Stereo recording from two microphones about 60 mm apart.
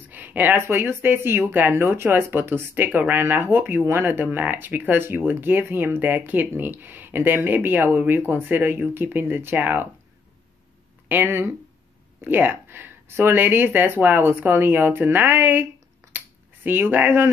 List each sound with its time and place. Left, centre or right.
0.0 s speech: right
11.1 s speech: right
16.1 s finger snapping: right
16.6 s speech: right